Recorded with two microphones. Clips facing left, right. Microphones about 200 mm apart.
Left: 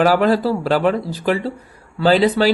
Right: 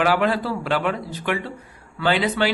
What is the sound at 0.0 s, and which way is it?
Speech, 40° left (ahead or behind).